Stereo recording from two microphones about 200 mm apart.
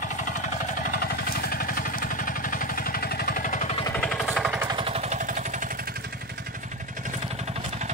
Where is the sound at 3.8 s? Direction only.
5° left (ahead or behind).